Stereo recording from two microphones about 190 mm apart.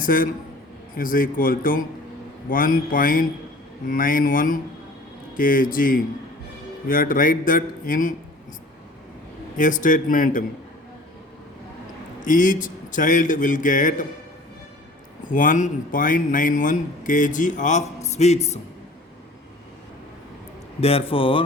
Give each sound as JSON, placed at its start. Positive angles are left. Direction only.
{"t": 0.0, "sound": "a man's voice", "side_deg": 45}
{"t": 9.6, "sound": "speech", "side_deg": 45}
{"t": 12.2, "sound": "speech", "side_deg": 45}
{"t": 15.3, "sound": "speech", "side_deg": 45}
{"t": 20.8, "sound": "speech", "side_deg": 30}